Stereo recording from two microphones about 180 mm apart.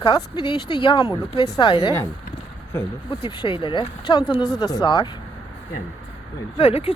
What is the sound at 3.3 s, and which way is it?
Speech, 25° left (ahead or behind).